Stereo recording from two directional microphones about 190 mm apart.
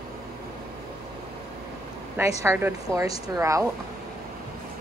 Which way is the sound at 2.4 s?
15° right (ahead or behind).